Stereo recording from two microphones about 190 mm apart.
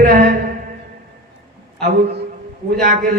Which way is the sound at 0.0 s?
50° right (ahead or behind).